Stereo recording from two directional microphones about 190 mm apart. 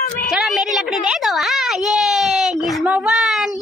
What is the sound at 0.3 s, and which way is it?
A woman's voice, centre (ahead or behind).